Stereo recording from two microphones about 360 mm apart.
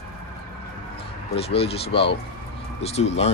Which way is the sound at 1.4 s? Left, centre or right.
Centre.